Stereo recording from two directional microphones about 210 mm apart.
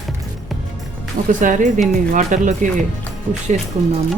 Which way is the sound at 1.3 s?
40° right (ahead or behind).